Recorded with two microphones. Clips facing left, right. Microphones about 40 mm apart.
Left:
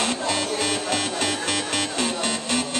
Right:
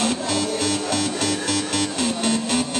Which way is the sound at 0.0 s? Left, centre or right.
Centre.